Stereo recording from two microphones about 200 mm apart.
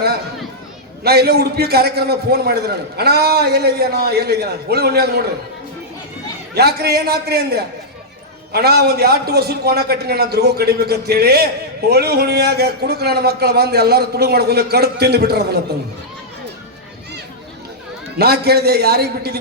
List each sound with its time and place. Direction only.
1.0 s a man's voice: 55° right (ahead or behind)
6.5 s a man's voice: 55° right (ahead or behind)
18.2 s a man's voice: 50° right (ahead or behind)